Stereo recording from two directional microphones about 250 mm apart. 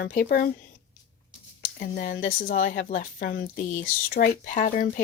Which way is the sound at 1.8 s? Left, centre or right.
Left.